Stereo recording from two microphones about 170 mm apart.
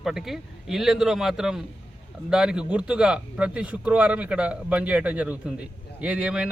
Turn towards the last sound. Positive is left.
turn(degrees=-5)  # may be behind; listen again after turning